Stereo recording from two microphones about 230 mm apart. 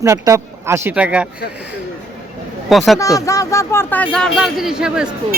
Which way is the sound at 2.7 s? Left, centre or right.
Centre.